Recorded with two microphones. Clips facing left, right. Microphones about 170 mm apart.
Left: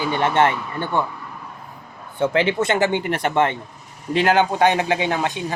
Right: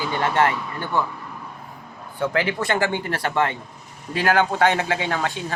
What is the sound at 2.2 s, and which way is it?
Speech, 25° left (ahead or behind).